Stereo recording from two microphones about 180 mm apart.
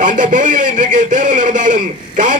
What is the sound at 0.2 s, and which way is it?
Speech, 45° right (ahead or behind).